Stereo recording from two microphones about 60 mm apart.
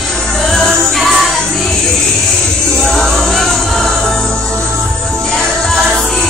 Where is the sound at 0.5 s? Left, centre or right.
Centre.